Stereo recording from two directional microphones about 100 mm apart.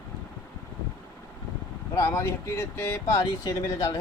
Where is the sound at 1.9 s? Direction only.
25° left (ahead or behind).